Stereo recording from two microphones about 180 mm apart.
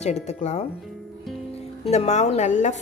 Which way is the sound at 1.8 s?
40° left (ahead or behind).